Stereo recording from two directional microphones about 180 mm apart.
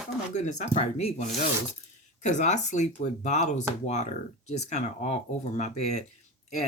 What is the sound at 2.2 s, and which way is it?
Speech, 40° left (ahead or behind).